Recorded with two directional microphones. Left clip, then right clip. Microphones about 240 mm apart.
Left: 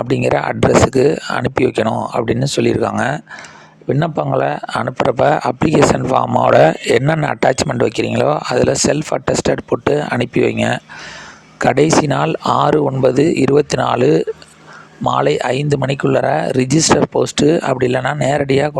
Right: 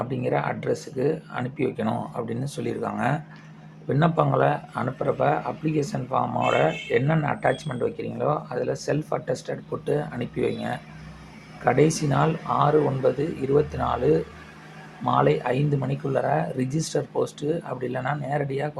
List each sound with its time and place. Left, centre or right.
0.0 s speech: left